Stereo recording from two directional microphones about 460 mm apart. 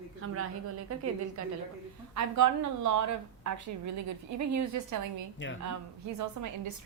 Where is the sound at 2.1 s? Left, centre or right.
Right.